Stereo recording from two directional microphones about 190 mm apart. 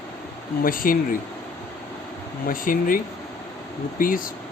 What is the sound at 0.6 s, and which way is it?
Speech, 50° left (ahead or behind).